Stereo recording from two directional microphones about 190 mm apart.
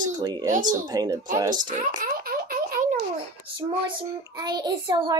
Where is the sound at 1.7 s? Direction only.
45° right (ahead or behind).